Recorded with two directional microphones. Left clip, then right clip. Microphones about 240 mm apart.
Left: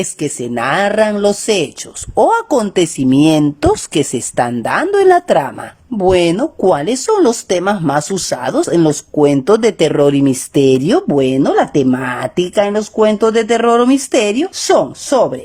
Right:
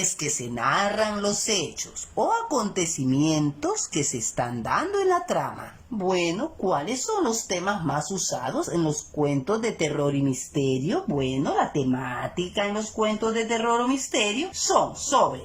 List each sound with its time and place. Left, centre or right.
0.0 s speech: left